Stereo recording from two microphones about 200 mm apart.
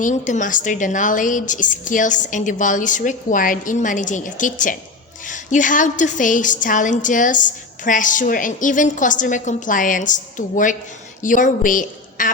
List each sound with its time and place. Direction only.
0.0 s a woman's voice: 40° left (ahead or behind)